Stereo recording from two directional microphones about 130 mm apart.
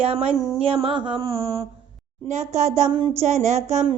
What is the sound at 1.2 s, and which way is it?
Mantra, 30° right (ahead or behind).